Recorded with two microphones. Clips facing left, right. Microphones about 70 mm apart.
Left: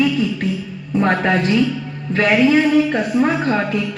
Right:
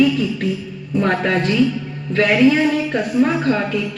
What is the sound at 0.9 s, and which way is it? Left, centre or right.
Speech, left.